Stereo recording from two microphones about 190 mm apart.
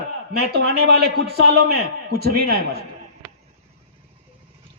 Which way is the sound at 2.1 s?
55° right (ahead or behind).